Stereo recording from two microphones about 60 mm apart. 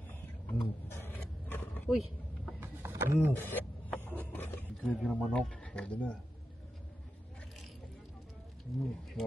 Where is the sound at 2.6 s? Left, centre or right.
Right.